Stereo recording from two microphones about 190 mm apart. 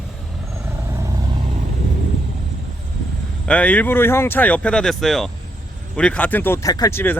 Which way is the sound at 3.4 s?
5° left (ahead or behind).